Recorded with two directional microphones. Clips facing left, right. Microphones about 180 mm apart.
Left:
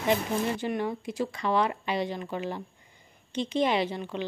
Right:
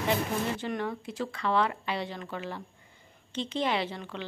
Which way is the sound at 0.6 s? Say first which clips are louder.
Left 3 dB; 10° left (ahead or behind).